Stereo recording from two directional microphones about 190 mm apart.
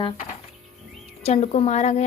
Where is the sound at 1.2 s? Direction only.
35° left (ahead or behind).